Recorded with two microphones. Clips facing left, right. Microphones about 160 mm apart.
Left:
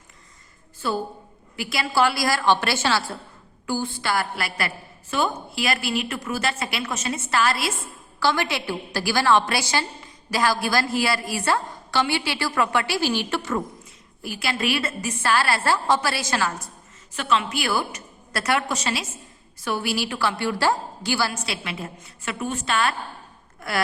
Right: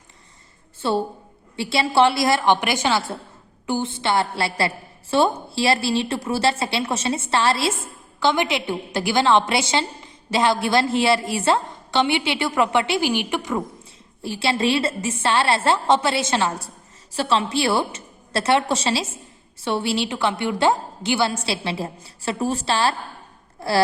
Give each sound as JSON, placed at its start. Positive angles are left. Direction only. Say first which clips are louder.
{"t": 0.8, "sound": "a woman's voice", "louder": "right 4 dB", "side_deg": -30}
{"t": 14.2, "sound": "a woman's voice", "louder": "right 5 dB", "side_deg": -30}